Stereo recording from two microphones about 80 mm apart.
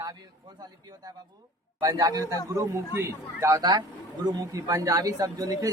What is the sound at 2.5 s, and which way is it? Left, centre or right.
Speech, right.